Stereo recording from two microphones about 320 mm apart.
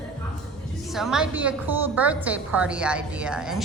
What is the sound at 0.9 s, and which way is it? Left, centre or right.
A woman's voice, centre.